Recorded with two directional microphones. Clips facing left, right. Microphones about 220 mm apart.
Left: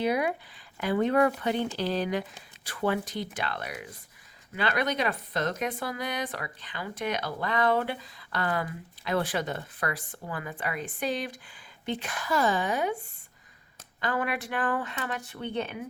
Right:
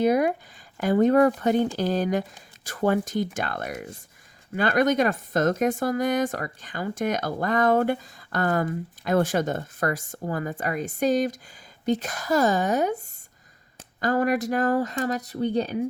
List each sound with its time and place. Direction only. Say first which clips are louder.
0.0 s speech: right 6 dB; 45° right (ahead or behind)